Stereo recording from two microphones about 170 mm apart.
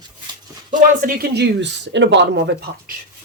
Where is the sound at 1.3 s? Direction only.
85° right.